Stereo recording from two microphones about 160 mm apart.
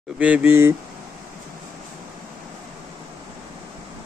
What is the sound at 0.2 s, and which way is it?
Speech, 10° right (ahead or behind).